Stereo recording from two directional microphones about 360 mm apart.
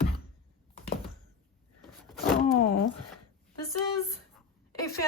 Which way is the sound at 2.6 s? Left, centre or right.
Left.